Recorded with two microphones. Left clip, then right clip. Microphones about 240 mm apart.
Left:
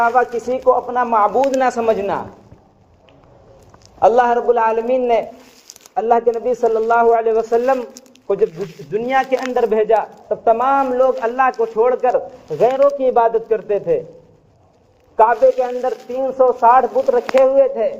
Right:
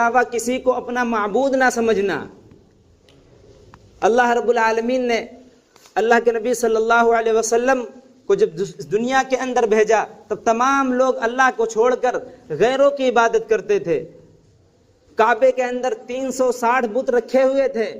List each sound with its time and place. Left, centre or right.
0.0 s a man's voice: right
4.0 s a man's voice: right
6.6 s a man's voice: right
8.9 s a man's voice: right
15.1 s a man's voice: right